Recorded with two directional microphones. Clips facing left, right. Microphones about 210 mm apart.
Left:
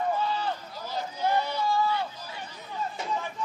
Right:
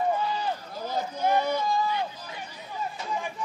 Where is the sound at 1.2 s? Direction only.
15° right (ahead or behind).